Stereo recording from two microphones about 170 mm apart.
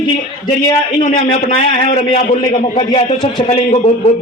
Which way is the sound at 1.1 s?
40° left (ahead or behind).